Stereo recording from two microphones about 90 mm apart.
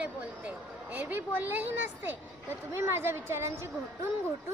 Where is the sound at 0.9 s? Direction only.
20° right (ahead or behind).